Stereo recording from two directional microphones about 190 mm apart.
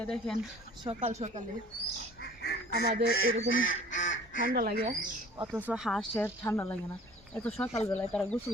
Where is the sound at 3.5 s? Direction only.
90° left.